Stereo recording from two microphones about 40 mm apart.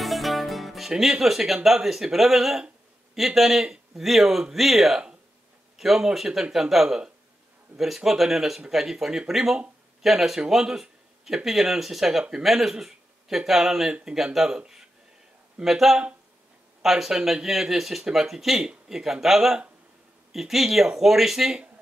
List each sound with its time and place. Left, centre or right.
0.0 s music: centre
1.8 s speech: centre
15.6 s speech: centre